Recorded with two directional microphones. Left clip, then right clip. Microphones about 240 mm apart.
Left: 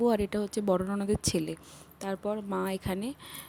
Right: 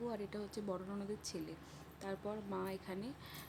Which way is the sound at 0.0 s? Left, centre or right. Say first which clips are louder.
Left 16 dB; left.